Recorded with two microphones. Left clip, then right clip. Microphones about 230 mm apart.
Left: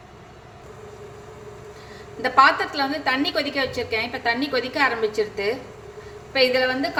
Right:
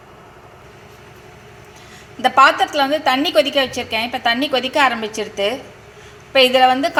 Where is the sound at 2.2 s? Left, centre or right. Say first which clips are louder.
Right 5 dB; centre.